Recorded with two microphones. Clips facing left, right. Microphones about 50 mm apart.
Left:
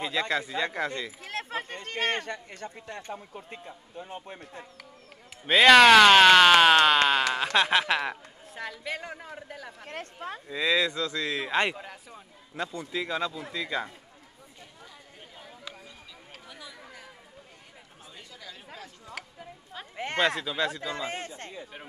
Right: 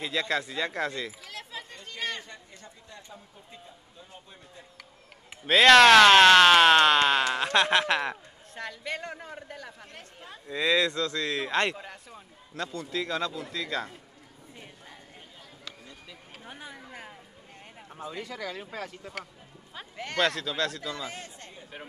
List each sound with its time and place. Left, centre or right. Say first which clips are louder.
0.3 s speech: left 1 dB; centre
1.2 s chatter: left 7 dB; left
1.8 s speech: left 5 dB; left
5.4 s speech: even; centre
9.8 s speech: left 9 dB; left
10.5 s speech: right 1 dB; centre
12.7 s speech: right 1 dB; centre
16.4 s a sound: right 4 dB; right
18.1 s speech: right 9 dB; right
20.2 s speech: left 1 dB; centre
20.9 s speech: left 4 dB; left